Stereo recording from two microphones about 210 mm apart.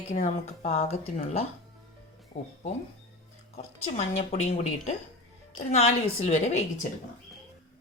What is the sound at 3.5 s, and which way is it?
Speech, 30° left (ahead or behind).